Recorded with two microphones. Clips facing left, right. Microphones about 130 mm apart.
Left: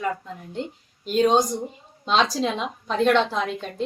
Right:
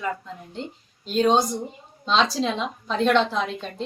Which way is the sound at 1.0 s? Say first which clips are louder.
Left 1 dB; 10° left (ahead or behind).